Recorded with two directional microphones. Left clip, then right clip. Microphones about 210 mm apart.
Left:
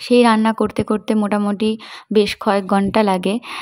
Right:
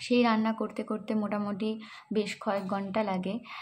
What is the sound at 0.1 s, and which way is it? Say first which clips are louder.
Speech: left 13 dB; 45° left (ahead or behind).